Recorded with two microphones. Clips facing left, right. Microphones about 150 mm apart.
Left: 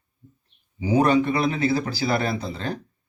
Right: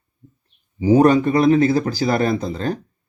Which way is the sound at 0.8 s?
45° right (ahead or behind).